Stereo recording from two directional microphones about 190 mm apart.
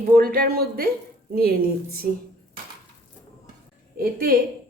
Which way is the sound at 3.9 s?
50° right (ahead or behind).